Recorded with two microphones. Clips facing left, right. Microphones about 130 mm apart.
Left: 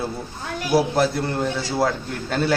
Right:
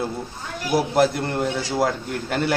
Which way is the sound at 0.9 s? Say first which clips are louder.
Right 1 dB; 15° right (ahead or behind).